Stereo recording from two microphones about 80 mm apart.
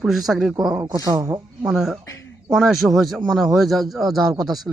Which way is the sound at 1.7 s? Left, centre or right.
Centre.